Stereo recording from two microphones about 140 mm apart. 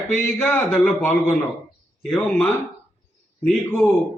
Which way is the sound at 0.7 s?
Centre (ahead or behind).